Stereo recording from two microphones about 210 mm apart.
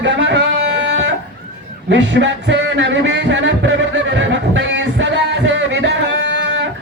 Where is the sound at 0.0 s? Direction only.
60° right (ahead or behind).